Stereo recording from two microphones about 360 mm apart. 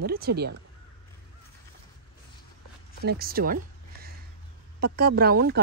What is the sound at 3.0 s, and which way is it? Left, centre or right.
Speech, right.